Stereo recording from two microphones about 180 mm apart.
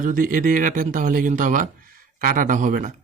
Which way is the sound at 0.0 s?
50° right (ahead or behind).